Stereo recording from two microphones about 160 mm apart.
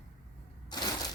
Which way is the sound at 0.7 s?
30° left (ahead or behind).